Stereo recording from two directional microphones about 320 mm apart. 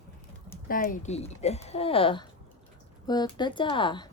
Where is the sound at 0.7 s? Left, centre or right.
Left.